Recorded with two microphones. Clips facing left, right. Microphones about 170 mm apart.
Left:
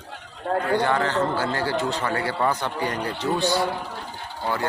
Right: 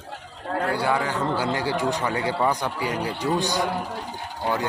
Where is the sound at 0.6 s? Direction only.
10° right (ahead or behind).